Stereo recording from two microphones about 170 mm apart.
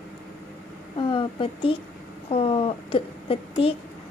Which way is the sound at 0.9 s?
30° left (ahead or behind).